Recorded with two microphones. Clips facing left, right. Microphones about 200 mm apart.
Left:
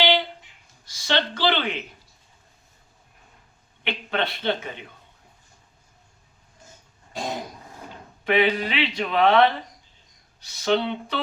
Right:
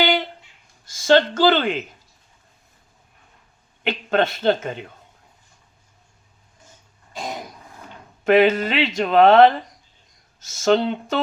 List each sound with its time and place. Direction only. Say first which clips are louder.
1.0 s speech: right 8 dB; 45° right (ahead or behind)
3.8 s speech: right 7 dB; 45° right (ahead or behind)
8.2 s speech: right 6 dB; 45° right (ahead or behind)